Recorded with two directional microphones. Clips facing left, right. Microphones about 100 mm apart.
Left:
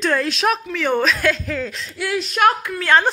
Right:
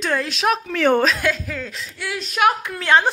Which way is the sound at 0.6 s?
55° right (ahead or behind).